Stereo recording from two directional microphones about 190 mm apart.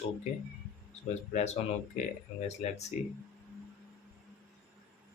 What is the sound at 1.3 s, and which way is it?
Speech, 35° left (ahead or behind).